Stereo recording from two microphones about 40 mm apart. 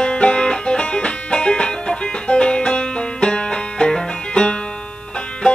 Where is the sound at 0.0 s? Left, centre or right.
Left.